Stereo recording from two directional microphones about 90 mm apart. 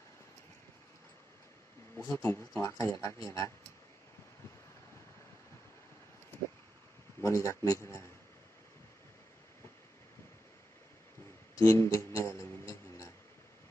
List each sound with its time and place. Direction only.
2.0 s speech: 30° left (ahead or behind)
7.2 s speech: 30° left (ahead or behind)
11.5 s music: 35° left (ahead or behind)